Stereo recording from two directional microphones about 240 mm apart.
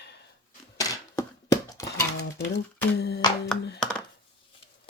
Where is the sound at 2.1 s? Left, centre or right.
Left.